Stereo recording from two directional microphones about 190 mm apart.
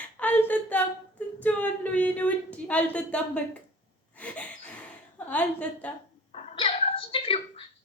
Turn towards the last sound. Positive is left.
turn(degrees=30)  # may be behind; listen again after turning